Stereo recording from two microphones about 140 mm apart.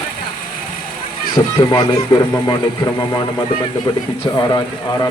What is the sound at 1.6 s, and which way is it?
Speech, 30° left (ahead or behind).